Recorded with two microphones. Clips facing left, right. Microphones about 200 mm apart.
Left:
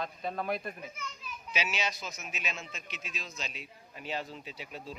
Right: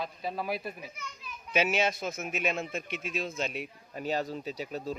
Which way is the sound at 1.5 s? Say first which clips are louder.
Right 8 dB; 55° right (ahead or behind).